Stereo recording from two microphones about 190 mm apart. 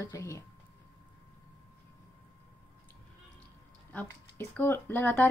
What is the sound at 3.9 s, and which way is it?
A woman's voice, 10° left (ahead or behind).